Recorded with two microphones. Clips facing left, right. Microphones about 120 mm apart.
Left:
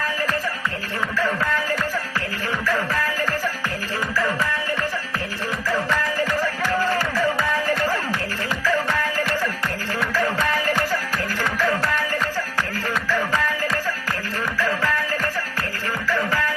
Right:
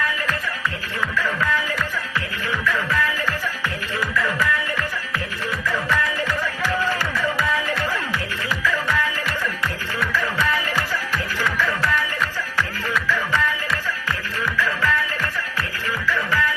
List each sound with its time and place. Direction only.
2.6 s music: 40° left (ahead or behind)
5.6 s music: 35° left (ahead or behind)
8.6 s music: 40° left (ahead or behind)
12.5 s music: 40° left (ahead or behind)